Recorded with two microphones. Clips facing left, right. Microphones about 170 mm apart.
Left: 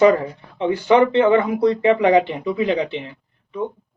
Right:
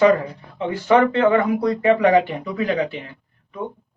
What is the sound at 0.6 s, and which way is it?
Speech, 20° left (ahead or behind).